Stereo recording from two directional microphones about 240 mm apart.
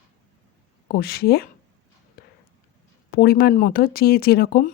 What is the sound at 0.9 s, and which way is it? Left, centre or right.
Speech, left.